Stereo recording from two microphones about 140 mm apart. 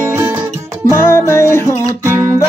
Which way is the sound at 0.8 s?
20° left (ahead or behind).